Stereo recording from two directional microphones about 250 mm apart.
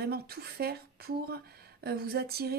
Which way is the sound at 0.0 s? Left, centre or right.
Right.